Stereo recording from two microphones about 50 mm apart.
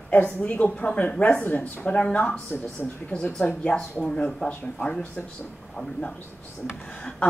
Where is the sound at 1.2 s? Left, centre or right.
Left.